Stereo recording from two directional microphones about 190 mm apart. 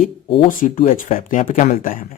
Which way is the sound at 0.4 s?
45° left (ahead or behind).